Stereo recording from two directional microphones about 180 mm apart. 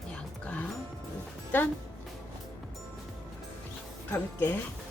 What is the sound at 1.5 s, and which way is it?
Speech, 10° left (ahead or behind).